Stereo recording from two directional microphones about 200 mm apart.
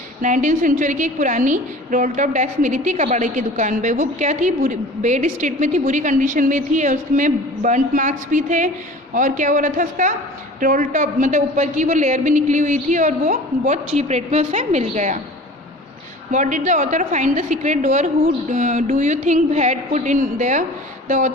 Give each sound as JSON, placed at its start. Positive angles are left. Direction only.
{"t": 0.2, "sound": "a woman's voice", "side_deg": -40}
{"t": 16.3, "sound": "a woman's voice", "side_deg": -40}